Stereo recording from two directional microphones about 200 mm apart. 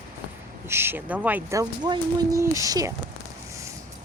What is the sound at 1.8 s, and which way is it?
Speech, 20° right (ahead or behind).